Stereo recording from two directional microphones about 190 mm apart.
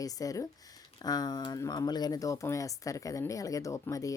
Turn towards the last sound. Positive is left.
turn(degrees=15)  # may be behind; listen again after turning